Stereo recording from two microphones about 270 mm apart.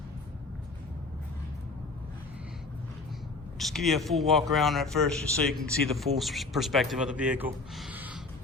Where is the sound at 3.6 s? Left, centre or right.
Centre.